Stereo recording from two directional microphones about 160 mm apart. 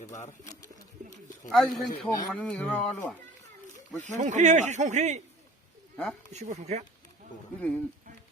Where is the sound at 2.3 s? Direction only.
10° left (ahead or behind).